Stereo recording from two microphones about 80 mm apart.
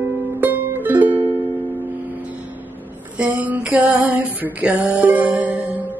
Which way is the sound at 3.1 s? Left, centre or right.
Centre.